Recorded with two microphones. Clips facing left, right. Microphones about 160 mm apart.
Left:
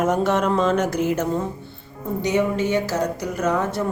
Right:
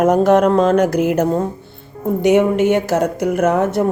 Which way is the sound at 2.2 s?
60° right (ahead or behind).